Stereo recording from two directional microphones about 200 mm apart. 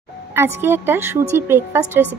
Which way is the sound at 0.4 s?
10° right (ahead or behind).